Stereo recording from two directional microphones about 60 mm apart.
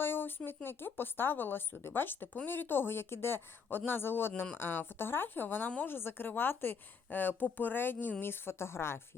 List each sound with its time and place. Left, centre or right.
0.0 s a woman's voice: left